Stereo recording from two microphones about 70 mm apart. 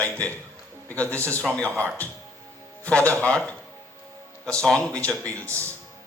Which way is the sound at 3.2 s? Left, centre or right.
Centre.